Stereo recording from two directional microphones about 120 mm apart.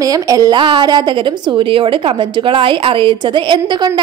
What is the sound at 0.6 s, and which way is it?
A woman's voice, 40° right (ahead or behind).